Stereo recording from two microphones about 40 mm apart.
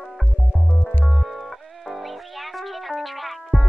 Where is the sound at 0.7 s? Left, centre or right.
Left.